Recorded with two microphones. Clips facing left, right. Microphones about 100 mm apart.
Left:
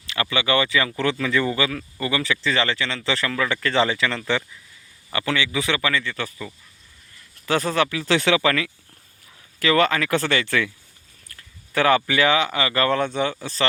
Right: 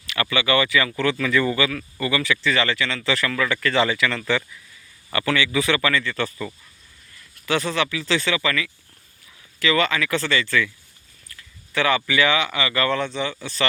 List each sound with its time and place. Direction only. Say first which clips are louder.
0.1 s speech: right 1 dB; 25° left (ahead or behind); by 6.5 s 10° left (ahead or behind)
7.3 s speech: left 2 dB; 40° left (ahead or behind); by 8.7 s 55° left (ahead or behind)
9.6 s speech: left 2 dB; 45° left (ahead or behind)
11.3 s speech: right 1 dB; 45° left (ahead or behind)
13.3 s speech: left 1 dB; 35° left (ahead or behind)